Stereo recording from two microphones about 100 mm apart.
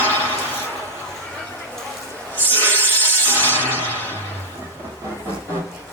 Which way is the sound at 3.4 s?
20° left (ahead or behind).